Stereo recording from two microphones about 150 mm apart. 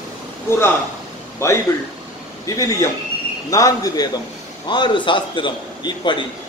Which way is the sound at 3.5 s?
25° left (ahead or behind).